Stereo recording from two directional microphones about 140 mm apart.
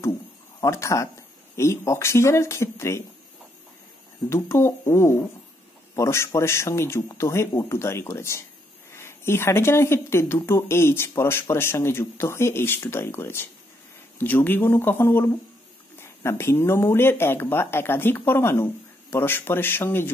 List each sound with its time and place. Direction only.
0.6 s speech: 20° left (ahead or behind)
4.3 s speech: 20° left (ahead or behind)